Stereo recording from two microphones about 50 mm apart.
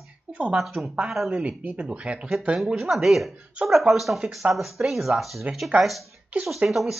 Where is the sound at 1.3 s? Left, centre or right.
Right.